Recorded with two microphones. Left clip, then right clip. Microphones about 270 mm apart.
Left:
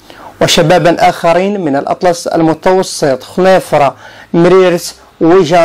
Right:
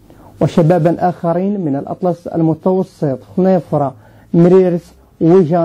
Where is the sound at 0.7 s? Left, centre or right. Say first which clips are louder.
Left 6 dB; centre.